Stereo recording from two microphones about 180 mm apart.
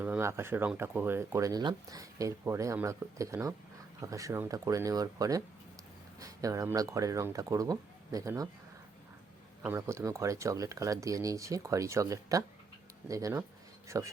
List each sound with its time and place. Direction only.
0.0 s speech: 10° right (ahead or behind)
9.6 s speech: 15° right (ahead or behind)